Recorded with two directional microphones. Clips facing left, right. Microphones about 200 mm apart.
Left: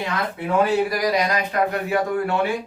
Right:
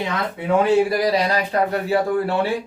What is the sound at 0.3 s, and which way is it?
A man's voice, 25° right (ahead or behind).